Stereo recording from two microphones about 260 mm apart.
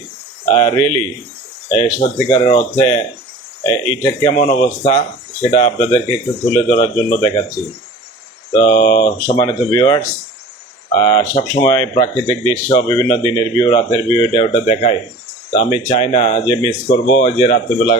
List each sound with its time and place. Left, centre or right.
0.5 s speech: centre
8.5 s speech: centre
9.0 s speech: left
9.4 s speech: centre